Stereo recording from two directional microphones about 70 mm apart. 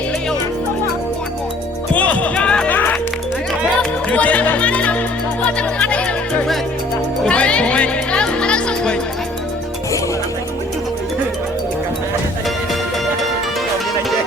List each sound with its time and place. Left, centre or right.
2.0 s music: centre
3.8 s music: centre
7.3 s music: centre